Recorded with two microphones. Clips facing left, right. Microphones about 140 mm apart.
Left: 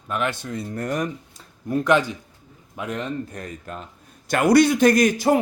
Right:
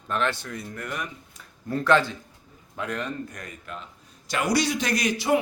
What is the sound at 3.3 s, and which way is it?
Speech, 30° left (ahead or behind).